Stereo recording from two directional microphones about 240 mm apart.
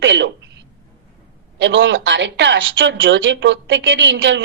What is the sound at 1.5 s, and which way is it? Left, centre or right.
A woman's voice, right.